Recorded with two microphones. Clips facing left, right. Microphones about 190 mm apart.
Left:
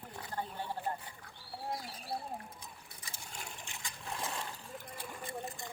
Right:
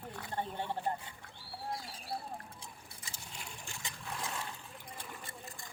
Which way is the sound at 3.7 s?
20° left (ahead or behind).